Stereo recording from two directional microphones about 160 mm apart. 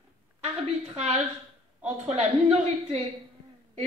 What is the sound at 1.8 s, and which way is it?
A woman's voice, 40° right (ahead or behind).